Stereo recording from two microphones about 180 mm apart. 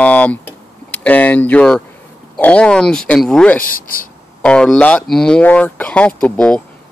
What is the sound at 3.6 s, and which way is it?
Speech, 50° left (ahead or behind).